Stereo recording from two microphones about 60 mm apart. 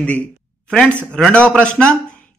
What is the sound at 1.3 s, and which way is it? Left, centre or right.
Speech, centre.